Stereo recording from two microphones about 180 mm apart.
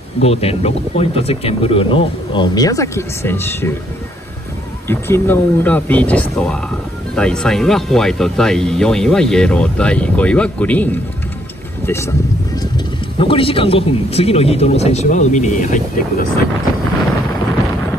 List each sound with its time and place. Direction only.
0.2 s speech: 35° left (ahead or behind); by 3.7 s 15° left (ahead or behind)
4.8 s speech: 10° left (ahead or behind)
12.7 s speech: 30° left (ahead or behind); by 16.3 s 45° left (ahead or behind)